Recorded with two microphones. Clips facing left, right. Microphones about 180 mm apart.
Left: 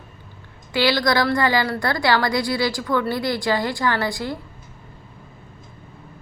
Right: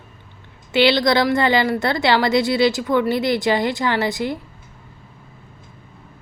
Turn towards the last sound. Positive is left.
turn(degrees=-20)  # may be behind; listen again after turning